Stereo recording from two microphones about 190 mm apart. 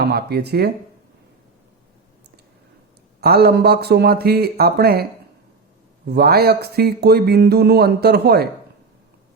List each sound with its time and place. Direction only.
0.0 s speech: 55° right (ahead or behind)
3.2 s speech: 55° right (ahead or behind)
6.1 s speech: 55° right (ahead or behind)